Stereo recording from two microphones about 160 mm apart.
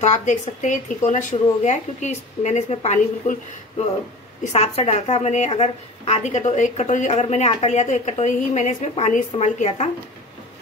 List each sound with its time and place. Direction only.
0.0 s a woman's voice: 45° left (ahead or behind)
4.5 s a woman's voice: 40° left (ahead or behind)